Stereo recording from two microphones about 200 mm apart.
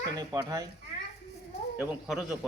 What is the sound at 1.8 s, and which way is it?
Speech, 5° right (ahead or behind).